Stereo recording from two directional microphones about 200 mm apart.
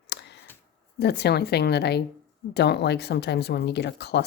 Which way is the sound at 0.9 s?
55° left (ahead or behind).